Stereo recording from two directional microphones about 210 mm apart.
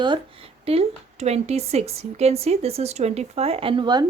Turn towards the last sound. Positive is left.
turn(degrees=-20)  # may be behind; listen again after turning